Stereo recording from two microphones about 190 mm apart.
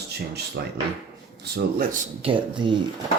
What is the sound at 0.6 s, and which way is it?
Speech, 60° right (ahead or behind).